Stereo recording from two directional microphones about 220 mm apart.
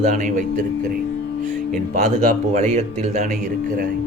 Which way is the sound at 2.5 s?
30° right (ahead or behind).